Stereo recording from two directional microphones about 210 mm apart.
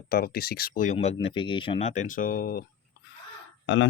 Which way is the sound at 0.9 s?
25° left (ahead or behind).